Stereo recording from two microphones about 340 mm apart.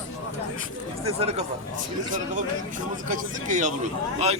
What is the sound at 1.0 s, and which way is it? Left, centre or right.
Speech, centre.